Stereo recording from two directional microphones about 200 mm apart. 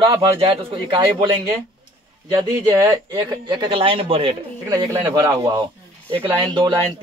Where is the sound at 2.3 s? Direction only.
15° right (ahead or behind).